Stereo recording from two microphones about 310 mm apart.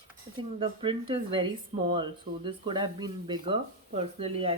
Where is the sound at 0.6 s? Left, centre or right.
Centre.